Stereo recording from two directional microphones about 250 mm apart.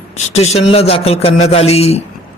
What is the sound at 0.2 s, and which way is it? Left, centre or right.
A man's voice, left.